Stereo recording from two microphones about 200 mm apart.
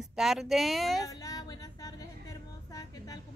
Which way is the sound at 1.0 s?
15° left (ahead or behind).